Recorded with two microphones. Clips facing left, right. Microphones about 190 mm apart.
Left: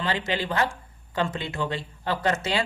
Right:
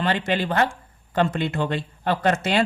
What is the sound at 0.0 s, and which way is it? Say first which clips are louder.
Speech: right 4 dB; 60° right (ahead or behind).